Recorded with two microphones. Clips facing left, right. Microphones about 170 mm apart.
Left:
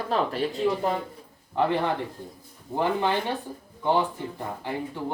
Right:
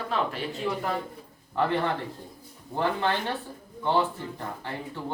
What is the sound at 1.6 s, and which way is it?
Speech, 15° left (ahead or behind).